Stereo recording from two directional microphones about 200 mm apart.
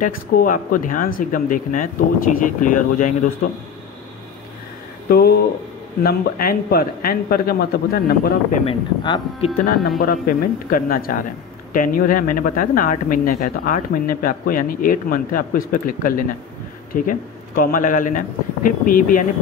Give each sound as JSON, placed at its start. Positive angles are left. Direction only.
{"t": 0.0, "sound": "speech", "side_deg": 45}
{"t": 5.0, "sound": "speech", "side_deg": 50}
{"t": 8.6, "sound": "speech", "side_deg": 25}
{"t": 9.8, "sound": "speech", "side_deg": 45}